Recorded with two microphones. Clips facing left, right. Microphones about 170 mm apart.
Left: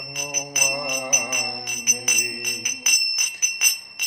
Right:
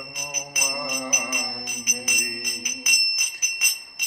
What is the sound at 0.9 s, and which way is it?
Music, 65° left (ahead or behind).